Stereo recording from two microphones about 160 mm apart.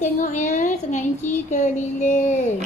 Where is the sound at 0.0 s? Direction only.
50° left (ahead or behind).